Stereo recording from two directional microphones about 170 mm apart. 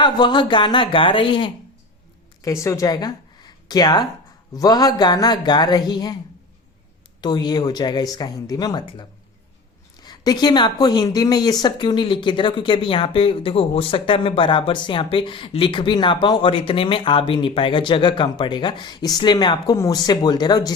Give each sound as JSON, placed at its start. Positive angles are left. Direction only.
{"t": 0.0, "sound": "speech", "side_deg": 25}
{"t": 2.4, "sound": "speech", "side_deg": 15}
{"t": 7.2, "sound": "speech", "side_deg": 25}